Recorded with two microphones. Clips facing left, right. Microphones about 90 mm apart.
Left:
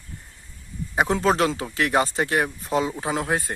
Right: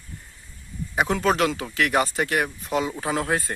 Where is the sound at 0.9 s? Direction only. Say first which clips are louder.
Left 1 dB; 25° left (ahead or behind).